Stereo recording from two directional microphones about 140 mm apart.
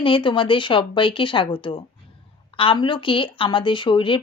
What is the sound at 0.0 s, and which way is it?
Speech, 35° left (ahead or behind).